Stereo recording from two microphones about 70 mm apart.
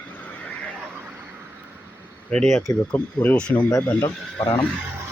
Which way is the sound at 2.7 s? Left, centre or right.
Left.